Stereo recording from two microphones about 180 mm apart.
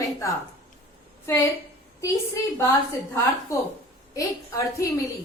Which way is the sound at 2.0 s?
15° left (ahead or behind).